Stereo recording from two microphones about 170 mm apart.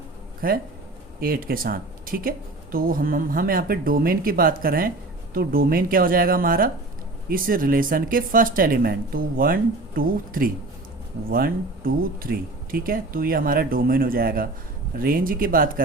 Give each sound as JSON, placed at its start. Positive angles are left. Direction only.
{"t": 0.4, "sound": "speech", "side_deg": -60}